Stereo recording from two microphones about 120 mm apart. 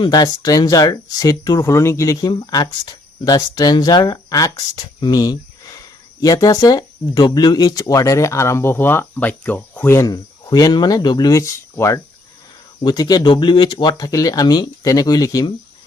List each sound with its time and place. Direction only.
0.0 s speech: 35° left (ahead or behind)
10.4 s speech: 35° left (ahead or behind)